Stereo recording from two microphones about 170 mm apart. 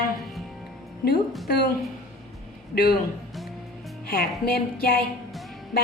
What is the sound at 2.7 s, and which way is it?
Speech, 60° left (ahead or behind).